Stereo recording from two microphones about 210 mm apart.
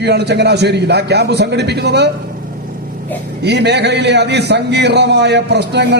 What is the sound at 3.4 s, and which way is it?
A man's voice, 50° right (ahead or behind).